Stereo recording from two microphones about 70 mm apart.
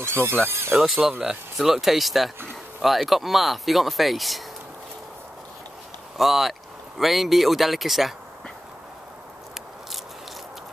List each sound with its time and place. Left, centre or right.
0.0 s speech: right
0.7 s speech: centre
6.1 s speech: centre